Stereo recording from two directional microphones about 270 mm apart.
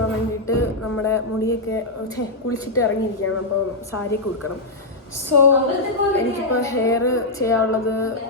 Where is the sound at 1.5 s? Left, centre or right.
Centre.